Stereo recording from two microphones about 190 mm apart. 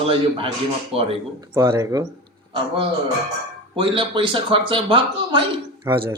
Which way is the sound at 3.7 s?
25° right (ahead or behind).